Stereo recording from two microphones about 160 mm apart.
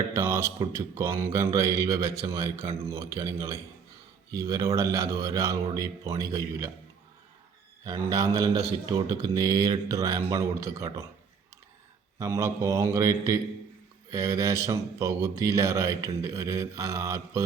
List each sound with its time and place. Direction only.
0.1 s a sound: 15° right (ahead or behind)
0.6 s speech: 20° right (ahead or behind)
7.9 s speech: 20° right (ahead or behind)
12.2 s speech: 20° right (ahead or behind)